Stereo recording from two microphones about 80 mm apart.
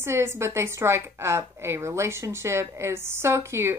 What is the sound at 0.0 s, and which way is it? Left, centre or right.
Speech, right.